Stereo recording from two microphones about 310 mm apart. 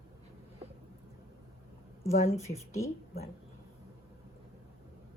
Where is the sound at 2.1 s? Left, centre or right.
Left.